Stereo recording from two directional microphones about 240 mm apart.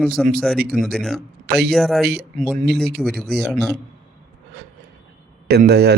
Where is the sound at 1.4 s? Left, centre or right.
Right.